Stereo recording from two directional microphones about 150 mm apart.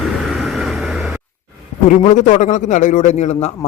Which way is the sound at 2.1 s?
55° left (ahead or behind).